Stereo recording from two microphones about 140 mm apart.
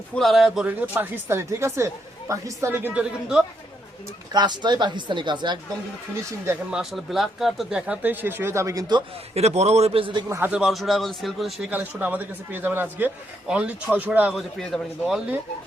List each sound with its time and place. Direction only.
0.1 s speech: centre (ahead or behind)
4.3 s speech: 30° right (ahead or behind)
6.7 s speech: 5° right (ahead or behind); by 9.0 s 30° right (ahead or behind)
9.3 s a man's voice: 50° right (ahead or behind)
10.2 s a man's voice: 15° right (ahead or behind)
11.7 s a man's voice: 10° right (ahead or behind)